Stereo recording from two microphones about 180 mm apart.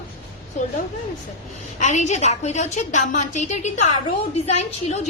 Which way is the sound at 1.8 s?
40° left (ahead or behind).